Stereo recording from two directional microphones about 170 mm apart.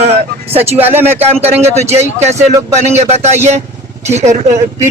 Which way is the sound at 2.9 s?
40° right (ahead or behind).